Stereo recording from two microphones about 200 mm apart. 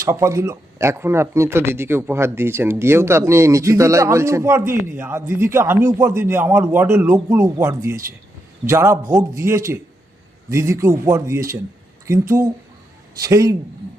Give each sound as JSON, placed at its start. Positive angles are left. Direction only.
{"t": 0.0, "sound": "speech", "side_deg": -15}